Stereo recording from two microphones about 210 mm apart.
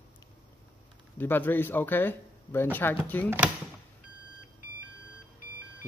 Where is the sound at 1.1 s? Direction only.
10° left (ahead or behind).